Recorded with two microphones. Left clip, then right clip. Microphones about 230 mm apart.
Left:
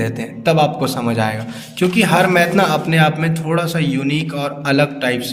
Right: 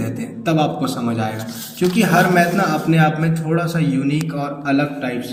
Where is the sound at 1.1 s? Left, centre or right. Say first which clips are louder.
Left 4 dB; left.